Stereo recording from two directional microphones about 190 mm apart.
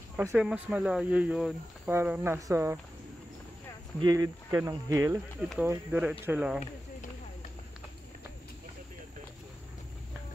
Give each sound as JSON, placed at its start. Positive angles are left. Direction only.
{"t": 0.3, "sound": "speech", "side_deg": -5}
{"t": 4.0, "sound": "speech", "side_deg": -20}